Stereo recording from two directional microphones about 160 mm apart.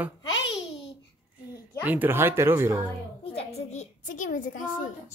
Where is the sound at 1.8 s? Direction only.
10° right (ahead or behind).